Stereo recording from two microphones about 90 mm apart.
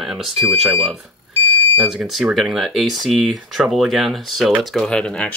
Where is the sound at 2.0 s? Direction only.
5° right (ahead or behind).